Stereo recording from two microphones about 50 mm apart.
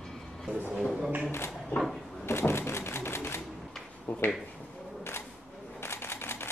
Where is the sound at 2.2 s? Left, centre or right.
Left.